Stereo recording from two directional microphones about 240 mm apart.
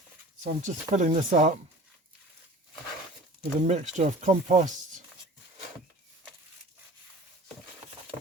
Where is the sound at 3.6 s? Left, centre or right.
Right.